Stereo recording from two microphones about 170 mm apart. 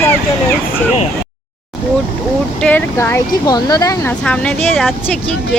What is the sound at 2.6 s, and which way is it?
Speech, 10° left (ahead or behind).